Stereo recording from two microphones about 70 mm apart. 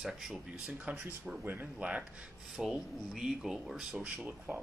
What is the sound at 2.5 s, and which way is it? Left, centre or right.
Speech, centre.